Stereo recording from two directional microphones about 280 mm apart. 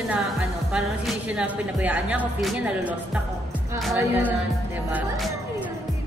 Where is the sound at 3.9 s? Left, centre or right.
Centre.